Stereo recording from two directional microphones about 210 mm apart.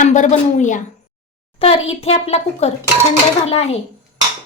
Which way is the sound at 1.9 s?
30° left (ahead or behind).